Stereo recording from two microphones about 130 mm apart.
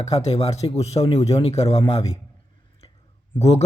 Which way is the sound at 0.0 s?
55° left (ahead or behind).